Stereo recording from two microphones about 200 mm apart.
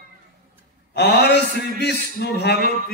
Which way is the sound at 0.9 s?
55° left (ahead or behind).